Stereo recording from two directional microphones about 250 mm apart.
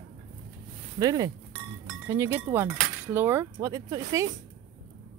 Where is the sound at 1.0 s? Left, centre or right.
Centre.